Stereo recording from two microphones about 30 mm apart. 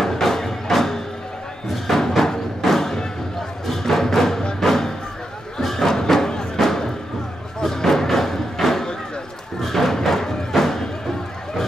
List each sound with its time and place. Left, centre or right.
0.0 s music: centre
9.6 s thump: centre
10.5 s music: centre